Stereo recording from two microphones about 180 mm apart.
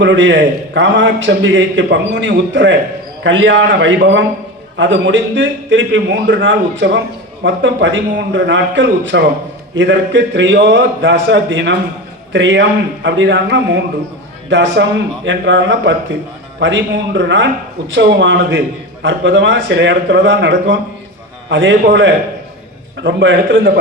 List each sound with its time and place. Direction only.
0.0 s a man's voice: 90° right